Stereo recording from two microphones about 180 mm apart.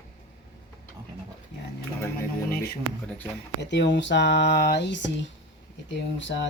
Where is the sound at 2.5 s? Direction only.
60° left (ahead or behind).